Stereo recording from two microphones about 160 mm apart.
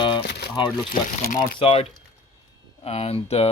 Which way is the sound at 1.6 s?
35° left (ahead or behind).